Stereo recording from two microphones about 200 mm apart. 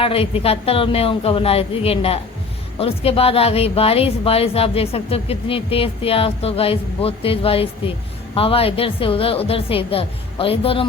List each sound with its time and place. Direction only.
0.0 s speech: 30° left (ahead or behind)